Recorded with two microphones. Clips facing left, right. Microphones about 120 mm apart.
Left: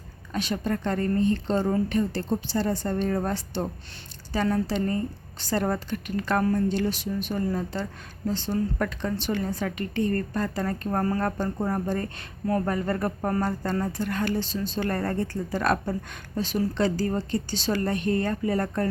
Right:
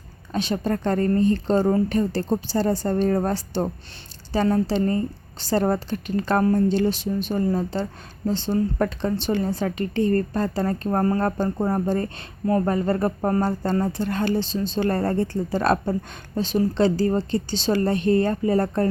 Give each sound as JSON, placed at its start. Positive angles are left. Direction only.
{"t": 0.3, "sound": "a woman's voice", "side_deg": -30}